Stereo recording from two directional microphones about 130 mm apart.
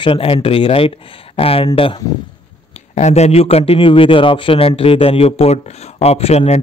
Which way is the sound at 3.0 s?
60° left (ahead or behind).